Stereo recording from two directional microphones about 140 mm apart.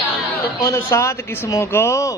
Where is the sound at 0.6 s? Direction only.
20° left (ahead or behind).